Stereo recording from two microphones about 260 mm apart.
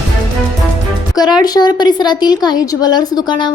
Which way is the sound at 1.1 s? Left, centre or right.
Centre.